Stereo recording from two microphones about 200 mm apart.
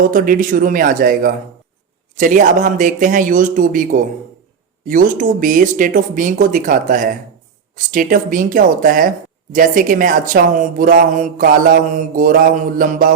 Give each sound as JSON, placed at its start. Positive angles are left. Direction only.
{"t": 0.0, "sound": "a man's voice", "side_deg": -45}